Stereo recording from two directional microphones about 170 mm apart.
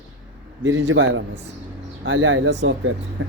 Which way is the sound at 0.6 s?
90° right.